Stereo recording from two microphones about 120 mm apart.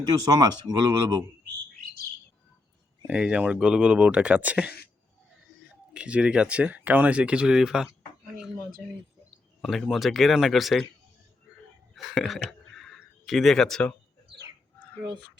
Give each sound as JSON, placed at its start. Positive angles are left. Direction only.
{"t": 0.3, "sound": "speech", "side_deg": -35}
{"t": 3.1, "sound": "speech", "side_deg": -10}
{"t": 5.9, "sound": "speech", "side_deg": -10}
{"t": 9.6, "sound": "a man's voice", "side_deg": 0}
{"t": 11.9, "sound": "a sound", "side_deg": 0}